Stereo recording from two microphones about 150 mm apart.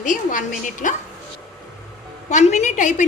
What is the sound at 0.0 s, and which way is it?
Speech, 60° left (ahead or behind).